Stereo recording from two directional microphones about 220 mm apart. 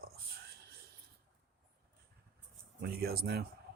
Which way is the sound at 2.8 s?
45° right (ahead or behind).